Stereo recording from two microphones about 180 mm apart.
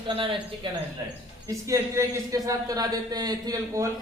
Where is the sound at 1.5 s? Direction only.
15° right (ahead or behind).